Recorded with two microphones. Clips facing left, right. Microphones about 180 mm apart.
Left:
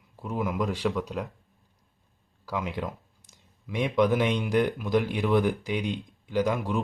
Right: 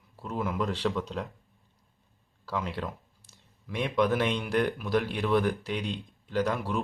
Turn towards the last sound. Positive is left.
turn(degrees=15)  # may be behind; listen again after turning